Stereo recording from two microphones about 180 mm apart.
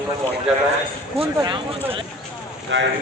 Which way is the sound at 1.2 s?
30° right (ahead or behind).